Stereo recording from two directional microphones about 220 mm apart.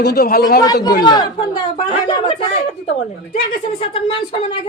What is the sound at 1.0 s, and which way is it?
A woman's voice, 20° left (ahead or behind).